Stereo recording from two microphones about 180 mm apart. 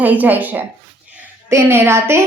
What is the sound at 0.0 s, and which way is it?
A woman's voice, 10° right (ahead or behind).